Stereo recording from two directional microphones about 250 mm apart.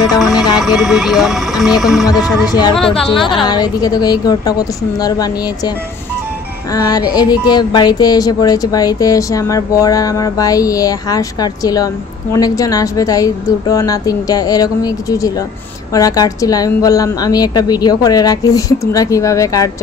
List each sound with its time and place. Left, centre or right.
0.1 s music: centre
0.4 s speech: centre
2.4 s music: centre
3.2 s speech: centre
3.4 s music: centre
6.7 s music: centre